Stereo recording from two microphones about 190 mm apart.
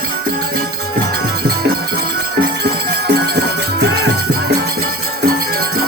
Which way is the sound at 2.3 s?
60° right (ahead or behind).